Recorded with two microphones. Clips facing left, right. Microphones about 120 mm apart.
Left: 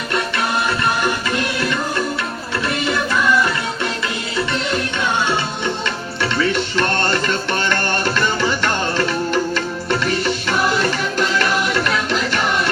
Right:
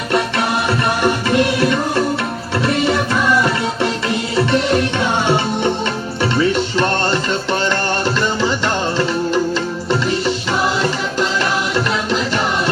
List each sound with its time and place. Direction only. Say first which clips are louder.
2.8 s music: right 2 dB; 30° right (ahead or behind)
6.2 s music: right 3 dB; 30° right (ahead or behind)